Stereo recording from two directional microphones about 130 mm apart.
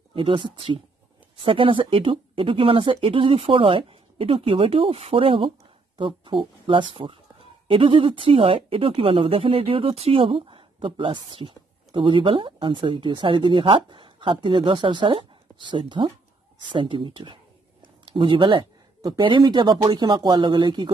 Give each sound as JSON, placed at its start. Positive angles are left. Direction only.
{"t": 0.1, "sound": "speech", "side_deg": -45}